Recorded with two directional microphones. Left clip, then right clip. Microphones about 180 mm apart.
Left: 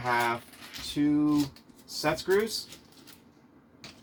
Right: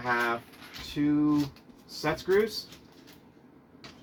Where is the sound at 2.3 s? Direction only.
50° left (ahead or behind).